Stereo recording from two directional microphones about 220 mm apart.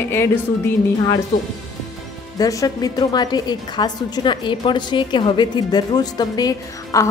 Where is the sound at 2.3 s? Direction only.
15° left (ahead or behind).